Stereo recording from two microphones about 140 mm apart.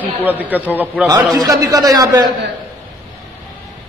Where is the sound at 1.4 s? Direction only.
25° right (ahead or behind).